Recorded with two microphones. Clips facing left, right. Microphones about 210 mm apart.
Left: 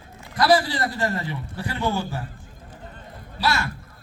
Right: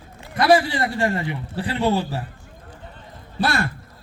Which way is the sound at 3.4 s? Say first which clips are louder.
Right 2 dB; 50° right (ahead or behind).